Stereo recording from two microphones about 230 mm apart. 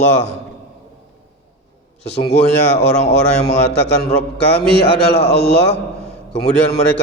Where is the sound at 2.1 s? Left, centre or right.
Left.